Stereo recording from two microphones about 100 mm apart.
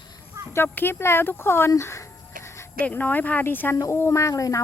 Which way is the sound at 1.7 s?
30° left (ahead or behind).